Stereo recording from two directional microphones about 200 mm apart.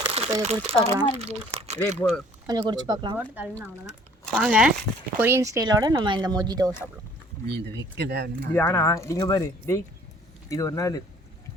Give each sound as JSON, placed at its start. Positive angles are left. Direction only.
{"t": 0.0, "sound": "crumpling", "side_deg": -30}
{"t": 0.3, "sound": "speech", "side_deg": -30}
{"t": 2.0, "sound": "speech", "side_deg": 5}
{"t": 2.5, "sound": "speech", "side_deg": -20}
{"t": 3.2, "sound": "speech", "side_deg": -10}
{"t": 5.2, "sound": "speech", "side_deg": -15}
{"t": 7.4, "sound": "speech", "side_deg": -55}
{"t": 8.5, "sound": "speech", "side_deg": 15}